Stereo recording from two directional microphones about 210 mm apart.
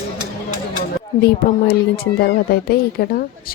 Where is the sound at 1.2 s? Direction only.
45° left (ahead or behind).